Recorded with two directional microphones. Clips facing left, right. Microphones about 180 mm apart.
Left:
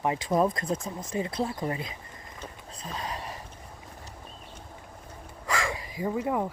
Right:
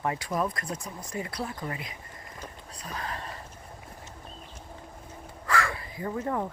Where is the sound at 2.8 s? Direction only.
20° left (ahead or behind).